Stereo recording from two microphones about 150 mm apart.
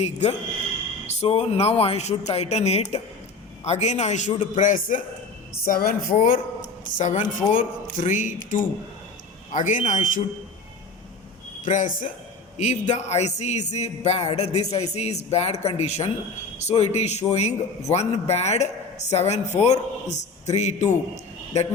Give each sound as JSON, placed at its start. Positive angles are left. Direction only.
{"t": 0.0, "sound": "speech", "side_deg": 45}
{"t": 6.9, "sound": "speech", "side_deg": 55}
{"t": 11.6, "sound": "speech", "side_deg": 60}
{"t": 12.5, "sound": "speech", "side_deg": 50}